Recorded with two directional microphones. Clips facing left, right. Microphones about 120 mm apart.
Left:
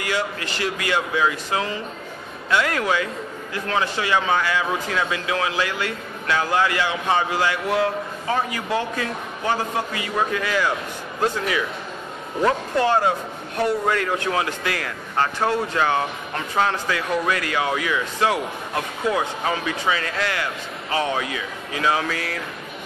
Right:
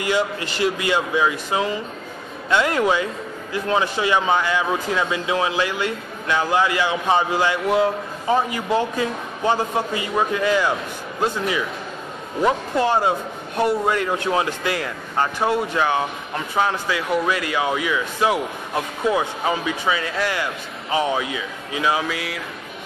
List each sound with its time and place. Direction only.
0.0 s speech: 25° right (ahead or behind)
12.4 s speech: 15° right (ahead or behind)